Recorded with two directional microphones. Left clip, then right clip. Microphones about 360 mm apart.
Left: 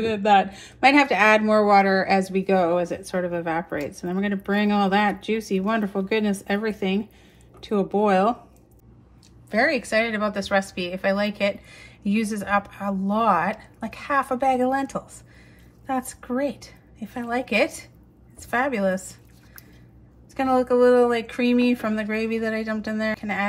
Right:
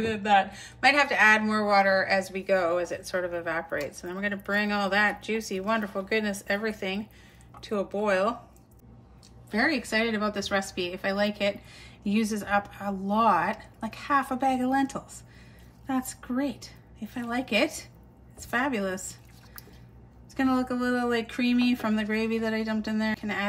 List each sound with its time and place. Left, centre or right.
0.0 s a woman's voice: centre
9.5 s a woman's voice: centre
20.3 s a woman's voice: centre